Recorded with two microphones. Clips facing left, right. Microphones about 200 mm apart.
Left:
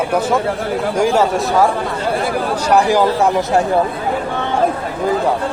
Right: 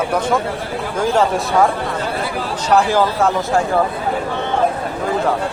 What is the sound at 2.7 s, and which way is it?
Speech, 15° left (ahead or behind).